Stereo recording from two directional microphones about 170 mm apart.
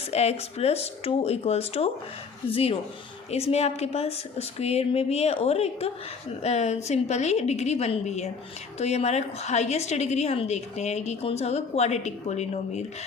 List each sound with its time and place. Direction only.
0.1 s a woman's voice: 40° left (ahead or behind)